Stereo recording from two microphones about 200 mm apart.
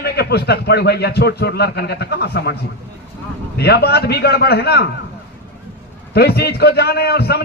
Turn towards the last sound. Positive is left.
turn(degrees=55)  # may be behind; listen again after turning